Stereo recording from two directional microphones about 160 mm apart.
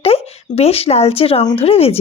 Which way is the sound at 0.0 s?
40° left (ahead or behind).